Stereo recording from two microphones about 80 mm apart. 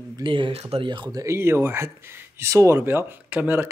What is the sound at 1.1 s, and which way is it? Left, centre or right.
Speech, right.